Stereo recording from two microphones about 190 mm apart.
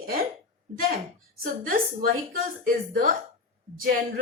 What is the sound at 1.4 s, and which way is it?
Speech, 50° right (ahead or behind).